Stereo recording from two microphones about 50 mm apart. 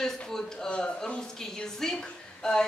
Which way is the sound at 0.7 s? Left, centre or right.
Left.